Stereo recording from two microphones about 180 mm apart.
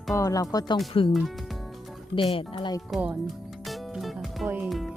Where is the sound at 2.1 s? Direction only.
30° left (ahead or behind).